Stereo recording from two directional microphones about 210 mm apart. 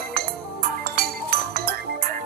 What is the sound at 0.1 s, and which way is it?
Music, 45° right (ahead or behind).